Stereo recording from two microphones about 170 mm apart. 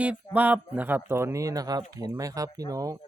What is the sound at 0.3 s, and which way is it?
Speech, 10° right (ahead or behind).